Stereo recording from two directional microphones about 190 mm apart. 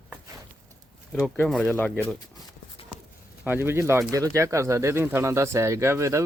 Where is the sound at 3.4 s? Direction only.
10° right (ahead or behind).